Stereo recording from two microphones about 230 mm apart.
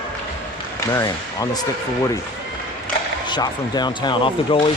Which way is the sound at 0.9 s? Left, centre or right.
Centre.